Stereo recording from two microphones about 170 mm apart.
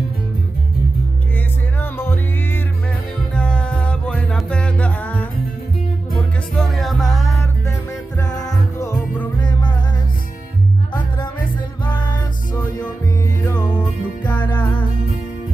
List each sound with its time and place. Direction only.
1.8 s music: 10° left (ahead or behind)
8.2 s music: 20° left (ahead or behind)
11.8 s music: 25° left (ahead or behind)
13.4 s music: 10° left (ahead or behind)
13.7 s music: 25° left (ahead or behind)
14.3 s music: 10° left (ahead or behind)